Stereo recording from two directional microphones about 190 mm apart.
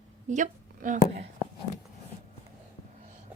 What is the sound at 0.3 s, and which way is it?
Speech, 40° right (ahead or behind).